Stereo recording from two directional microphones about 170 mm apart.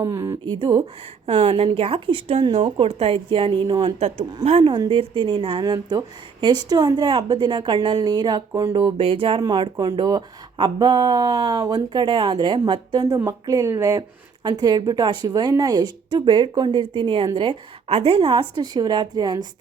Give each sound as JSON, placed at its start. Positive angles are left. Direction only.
{"t": 0.0, "sound": "a woman's voice", "side_deg": -20}